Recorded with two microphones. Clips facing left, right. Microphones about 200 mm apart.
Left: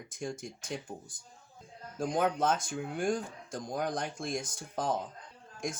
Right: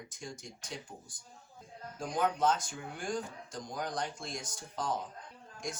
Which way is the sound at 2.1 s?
50° left (ahead or behind).